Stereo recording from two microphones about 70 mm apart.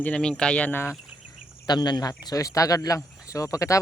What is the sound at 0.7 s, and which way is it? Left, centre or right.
Speech, left.